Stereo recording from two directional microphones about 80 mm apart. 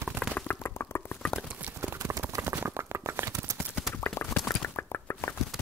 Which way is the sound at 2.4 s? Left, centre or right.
Right.